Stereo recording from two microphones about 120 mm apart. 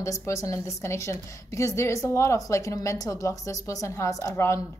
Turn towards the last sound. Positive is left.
turn(degrees=25)  # may be behind; listen again after turning